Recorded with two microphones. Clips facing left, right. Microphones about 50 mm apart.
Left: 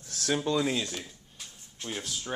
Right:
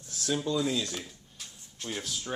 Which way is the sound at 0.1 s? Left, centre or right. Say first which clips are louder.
Left 2 dB; left.